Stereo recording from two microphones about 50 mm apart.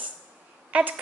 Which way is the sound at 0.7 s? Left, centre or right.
Right.